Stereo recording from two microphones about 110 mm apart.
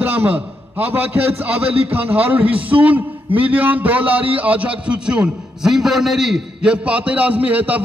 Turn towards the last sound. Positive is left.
turn(degrees=-15)  # may be behind; listen again after turning